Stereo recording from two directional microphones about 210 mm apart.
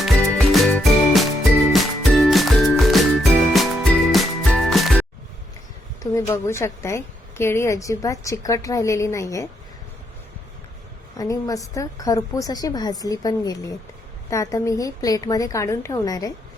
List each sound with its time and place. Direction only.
0.0 s music: centre (ahead or behind)
6.1 s a woman's voice: 15° left (ahead or behind)
11.2 s a woman's voice: 15° left (ahead or behind)